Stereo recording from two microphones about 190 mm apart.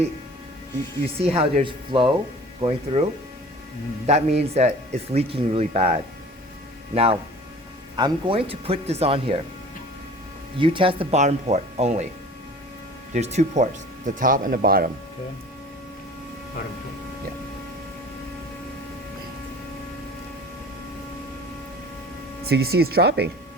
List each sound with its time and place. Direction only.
1.2 s speech: 30° right (ahead or behind)
4.0 s speech: 35° right (ahead or behind)
10.6 s speech: 25° right (ahead or behind)
13.1 s speech: 35° right (ahead or behind)
22.4 s speech: 55° right (ahead or behind)